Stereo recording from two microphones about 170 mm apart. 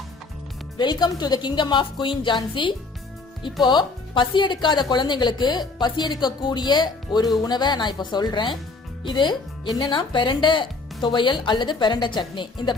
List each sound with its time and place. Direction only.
0.8 s speech: 25° left (ahead or behind)